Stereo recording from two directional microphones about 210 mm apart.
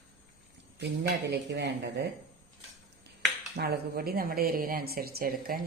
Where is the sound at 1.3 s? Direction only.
55° right (ahead or behind).